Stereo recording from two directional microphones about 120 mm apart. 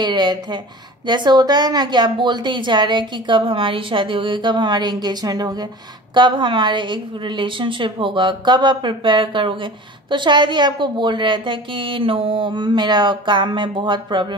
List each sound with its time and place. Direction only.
0.0 s a woman's voice: 35° right (ahead or behind)